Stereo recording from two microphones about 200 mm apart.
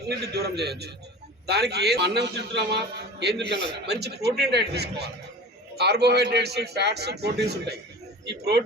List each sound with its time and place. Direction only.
0.1 s a man's voice: 55° right (ahead or behind)